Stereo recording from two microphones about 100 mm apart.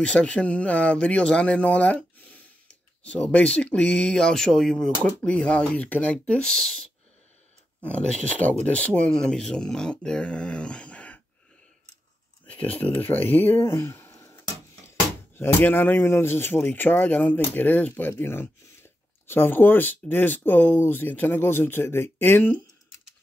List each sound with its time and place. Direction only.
0.0 s speech: 10° left (ahead or behind)
12.4 s speech: 15° left (ahead or behind)